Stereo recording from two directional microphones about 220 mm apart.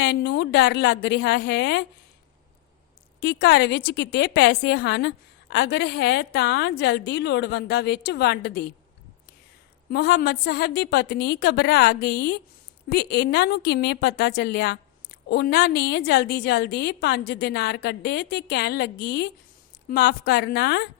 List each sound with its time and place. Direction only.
0.0 s a woman's voice: 50° left (ahead or behind)
3.2 s a woman's voice: 50° left (ahead or behind)
9.9 s a woman's voice: 45° left (ahead or behind)